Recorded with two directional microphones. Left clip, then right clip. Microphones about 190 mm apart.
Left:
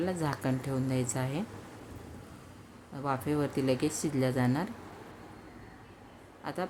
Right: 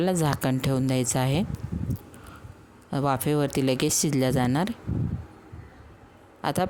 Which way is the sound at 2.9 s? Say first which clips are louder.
Right 7 dB; 55° right (ahead or behind).